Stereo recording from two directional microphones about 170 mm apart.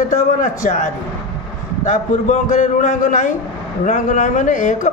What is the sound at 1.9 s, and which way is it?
A man's voice, 50° left (ahead or behind).